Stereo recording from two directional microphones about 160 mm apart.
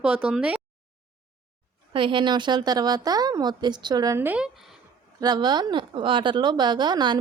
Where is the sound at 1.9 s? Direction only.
30° right (ahead or behind); by 4.7 s 5° right (ahead or behind).